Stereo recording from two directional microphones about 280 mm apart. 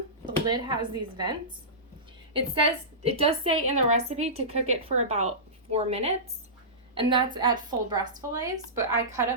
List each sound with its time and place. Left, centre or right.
0.4 s a woman's voice: centre
2.3 s a woman's voice: centre